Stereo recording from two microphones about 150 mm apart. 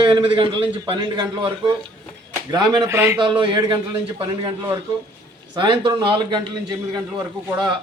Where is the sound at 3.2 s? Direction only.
35° right (ahead or behind).